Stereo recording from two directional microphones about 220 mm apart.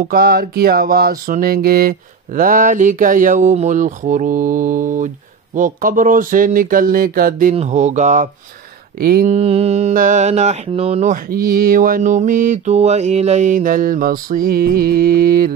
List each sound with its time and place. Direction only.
0.0 s music: 40° right (ahead or behind)